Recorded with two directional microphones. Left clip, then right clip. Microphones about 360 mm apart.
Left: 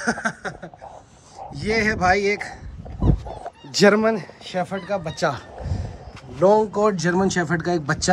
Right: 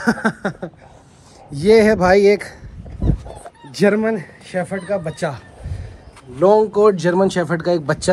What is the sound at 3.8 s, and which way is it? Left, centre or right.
Speech, left.